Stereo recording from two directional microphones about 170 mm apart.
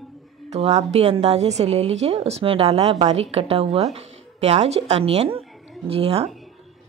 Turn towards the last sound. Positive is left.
turn(degrees=-35)  # may be behind; listen again after turning